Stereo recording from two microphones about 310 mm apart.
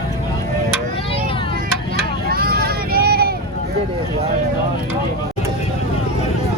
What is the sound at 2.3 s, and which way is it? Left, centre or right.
Vehicle, right.